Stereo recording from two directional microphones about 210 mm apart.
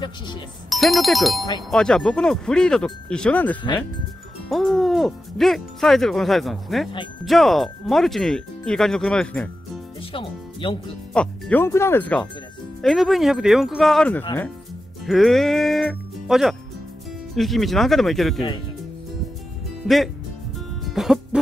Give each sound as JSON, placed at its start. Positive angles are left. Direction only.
{"t": 0.7, "sound": "speech", "side_deg": 0}
{"t": 10.1, "sound": "speech", "side_deg": 25}
{"t": 11.1, "sound": "speech", "side_deg": 5}
{"t": 19.9, "sound": "speech", "side_deg": 0}
{"t": 20.5, "sound": "music", "side_deg": 0}